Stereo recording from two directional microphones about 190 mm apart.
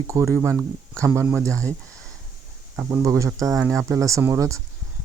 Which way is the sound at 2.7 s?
15° right (ahead or behind).